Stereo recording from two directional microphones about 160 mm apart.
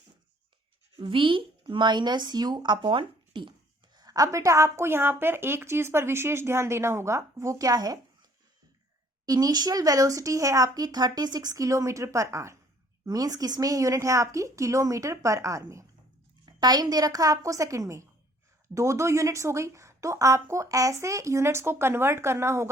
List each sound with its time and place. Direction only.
0.9 s a woman's voice: 30° right (ahead or behind)
9.2 s a woman's voice: 25° right (ahead or behind)